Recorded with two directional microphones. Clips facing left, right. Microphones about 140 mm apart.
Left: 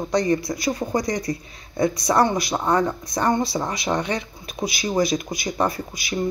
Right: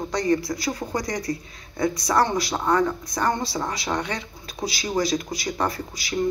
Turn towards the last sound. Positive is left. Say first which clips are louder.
# left 2 dB
turn(degrees=15)  # may be behind; listen again after turning